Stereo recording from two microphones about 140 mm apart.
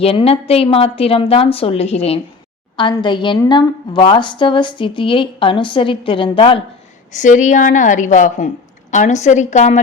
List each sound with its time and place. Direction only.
0.0 s a woman's voice: 45° left (ahead or behind)
2.7 s a woman's voice: 35° left (ahead or behind)
7.1 s a woman's voice: 65° left (ahead or behind)